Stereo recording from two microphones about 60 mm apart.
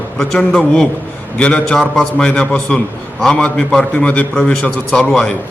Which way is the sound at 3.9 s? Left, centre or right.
Left.